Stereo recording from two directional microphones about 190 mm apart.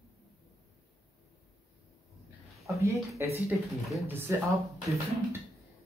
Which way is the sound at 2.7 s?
15° right (ahead or behind).